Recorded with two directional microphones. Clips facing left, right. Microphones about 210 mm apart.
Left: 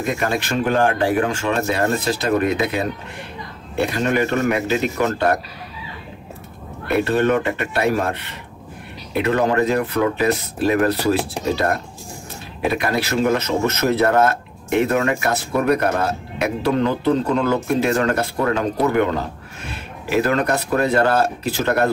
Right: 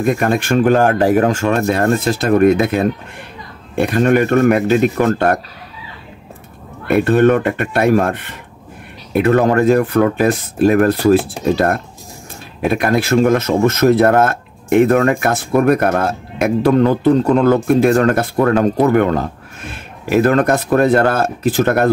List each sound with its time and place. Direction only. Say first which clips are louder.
0.0 s speech: right 6 dB; 50° right (ahead or behind)
7.1 s speech: right 7 dB; 50° right (ahead or behind)